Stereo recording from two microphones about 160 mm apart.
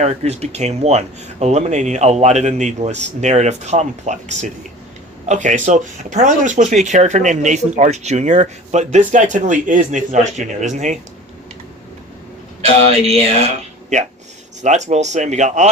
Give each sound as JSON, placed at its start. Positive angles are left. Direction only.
{"t": 0.0, "sound": "speech", "side_deg": -45}
{"t": 13.9, "sound": "speech", "side_deg": -50}